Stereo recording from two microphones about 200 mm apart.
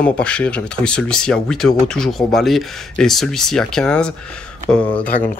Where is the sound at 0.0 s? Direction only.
5° left (ahead or behind).